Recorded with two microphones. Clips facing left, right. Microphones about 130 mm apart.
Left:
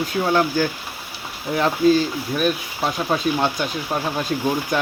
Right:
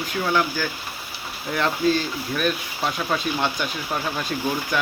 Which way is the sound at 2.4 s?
20° left (ahead or behind).